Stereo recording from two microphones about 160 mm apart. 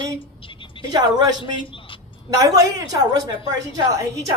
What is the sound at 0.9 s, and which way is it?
A woman's voice, 25° right (ahead or behind).